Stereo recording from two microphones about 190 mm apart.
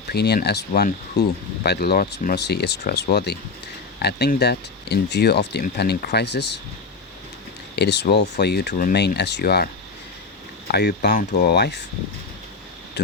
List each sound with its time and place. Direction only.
0.1 s speech: 55° left (ahead or behind)
7.8 s speech: 60° left (ahead or behind)
10.7 s speech: 55° left (ahead or behind)